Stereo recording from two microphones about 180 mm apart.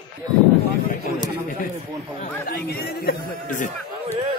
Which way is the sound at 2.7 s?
60° left (ahead or behind).